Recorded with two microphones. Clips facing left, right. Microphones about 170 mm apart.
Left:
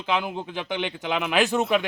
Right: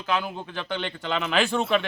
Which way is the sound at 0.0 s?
15° left (ahead or behind).